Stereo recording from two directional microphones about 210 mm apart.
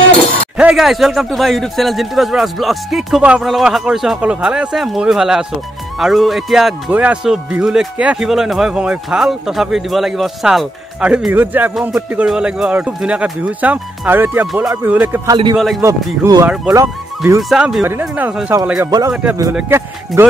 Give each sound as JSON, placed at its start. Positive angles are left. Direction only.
{"t": 0.6, "sound": "speech", "side_deg": -5}
{"t": 15.8, "sound": "speech", "side_deg": -15}
{"t": 17.4, "sound": "speech", "side_deg": 0}
{"t": 18.9, "sound": "speech", "side_deg": -15}